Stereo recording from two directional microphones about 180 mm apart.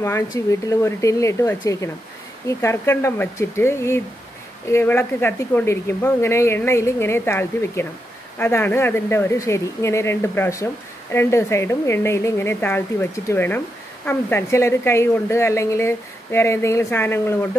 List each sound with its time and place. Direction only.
0.0 s speech: 15° left (ahead or behind)